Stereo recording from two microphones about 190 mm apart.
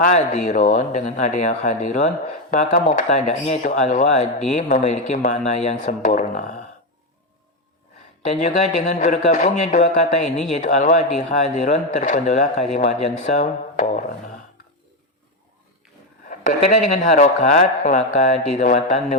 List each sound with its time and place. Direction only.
0.0 s speech: 40° left (ahead or behind)
8.3 s speech: 40° left (ahead or behind)
10.2 s speech: centre (ahead or behind)
10.5 s speech: 40° left (ahead or behind)
16.3 s speech: 40° left (ahead or behind)